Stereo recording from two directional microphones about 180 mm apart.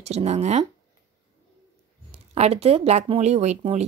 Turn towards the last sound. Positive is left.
turn(degrees=-40)  # may be behind; listen again after turning